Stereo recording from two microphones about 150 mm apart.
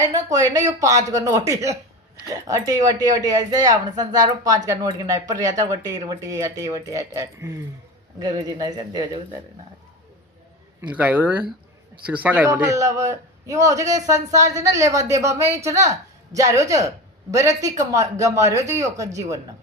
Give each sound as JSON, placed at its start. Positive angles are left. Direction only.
{"t": 0.0, "sound": "speech", "side_deg": -25}
{"t": 10.8, "sound": "a man's voice", "side_deg": -10}